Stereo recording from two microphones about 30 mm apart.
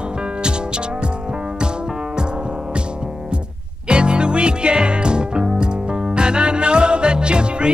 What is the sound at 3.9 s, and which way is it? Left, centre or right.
Music, right.